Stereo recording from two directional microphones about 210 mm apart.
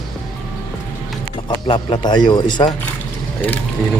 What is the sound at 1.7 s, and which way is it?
Speech, 20° left (ahead or behind).